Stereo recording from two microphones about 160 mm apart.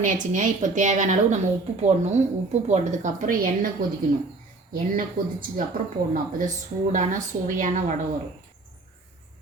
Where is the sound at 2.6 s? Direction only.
45° right (ahead or behind).